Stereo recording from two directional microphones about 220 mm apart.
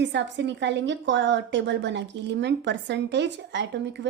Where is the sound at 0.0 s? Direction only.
55° right (ahead or behind).